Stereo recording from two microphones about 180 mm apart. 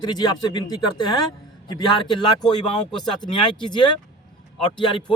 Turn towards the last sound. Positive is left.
turn(degrees=25)  # may be behind; listen again after turning